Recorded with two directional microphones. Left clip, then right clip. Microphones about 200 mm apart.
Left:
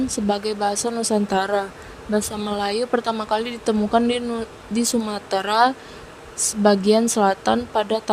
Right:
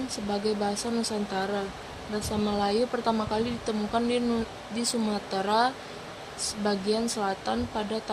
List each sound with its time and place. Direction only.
0.1 s speech: 50° left (ahead or behind)